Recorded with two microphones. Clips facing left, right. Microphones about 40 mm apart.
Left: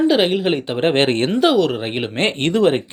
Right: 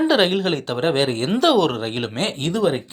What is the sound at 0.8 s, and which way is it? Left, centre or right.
Speech, left.